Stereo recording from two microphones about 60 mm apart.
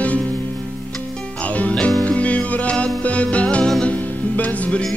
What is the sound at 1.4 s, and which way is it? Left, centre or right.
Music, left.